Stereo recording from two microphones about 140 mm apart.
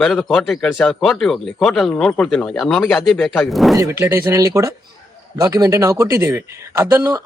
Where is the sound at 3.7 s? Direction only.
20° right (ahead or behind).